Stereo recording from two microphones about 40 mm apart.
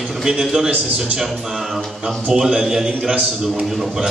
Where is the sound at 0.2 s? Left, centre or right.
Centre.